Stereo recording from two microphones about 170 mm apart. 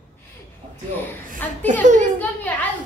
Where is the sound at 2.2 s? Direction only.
10° left (ahead or behind).